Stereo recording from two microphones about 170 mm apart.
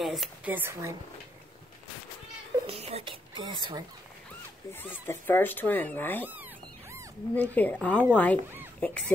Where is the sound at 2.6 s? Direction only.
35° right (ahead or behind).